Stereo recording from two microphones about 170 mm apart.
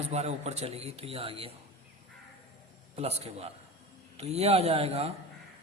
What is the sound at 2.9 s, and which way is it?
A man's voice, 40° right (ahead or behind).